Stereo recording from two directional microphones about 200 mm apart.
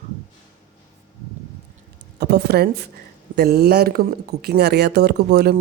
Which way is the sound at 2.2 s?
55° right (ahead or behind).